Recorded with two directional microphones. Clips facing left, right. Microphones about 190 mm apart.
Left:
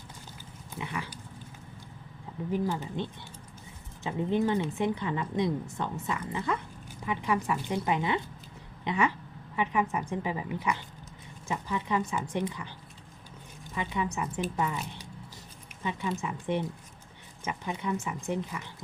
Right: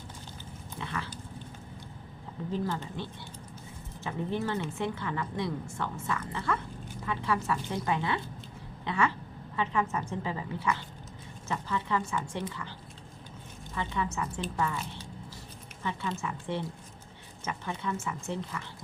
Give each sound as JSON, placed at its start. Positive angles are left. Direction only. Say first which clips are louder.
{"t": 0.8, "sound": "dog", "louder": "left 1 dB", "side_deg": 15}
{"t": 2.5, "sound": "a woman's voice", "louder": "left 3 dB", "side_deg": 15}
{"t": 13.7, "sound": "a woman's voice", "louder": "left 1 dB", "side_deg": 15}